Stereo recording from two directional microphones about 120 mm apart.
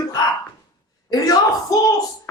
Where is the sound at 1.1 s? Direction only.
30° left (ahead or behind).